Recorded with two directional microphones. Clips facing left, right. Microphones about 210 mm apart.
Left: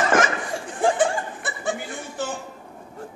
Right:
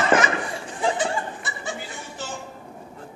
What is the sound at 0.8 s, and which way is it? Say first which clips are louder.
Laughter: left 4 dB; 55° left (ahead or behind).